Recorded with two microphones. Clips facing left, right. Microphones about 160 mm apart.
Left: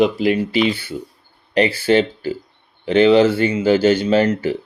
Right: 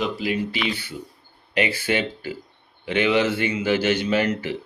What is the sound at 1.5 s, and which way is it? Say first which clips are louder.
Speech: left 8 dB; 35° left (ahead or behind).